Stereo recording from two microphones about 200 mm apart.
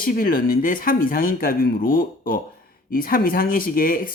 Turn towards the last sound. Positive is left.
turn(degrees=45)  # may be behind; listen again after turning